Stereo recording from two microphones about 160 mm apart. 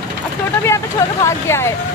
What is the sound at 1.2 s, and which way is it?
Speech, 15° left (ahead or behind).